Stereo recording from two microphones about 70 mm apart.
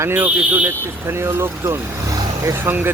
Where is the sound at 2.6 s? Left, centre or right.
Right.